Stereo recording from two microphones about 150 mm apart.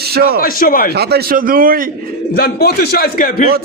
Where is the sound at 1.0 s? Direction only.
90° right; by 1.7 s 70° right (ahead or behind).